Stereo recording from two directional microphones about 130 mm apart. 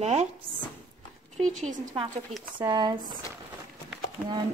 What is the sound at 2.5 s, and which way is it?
Speech, 35° right (ahead or behind).